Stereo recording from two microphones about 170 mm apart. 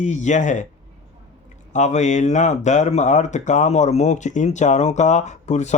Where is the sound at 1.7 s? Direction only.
45° left (ahead or behind).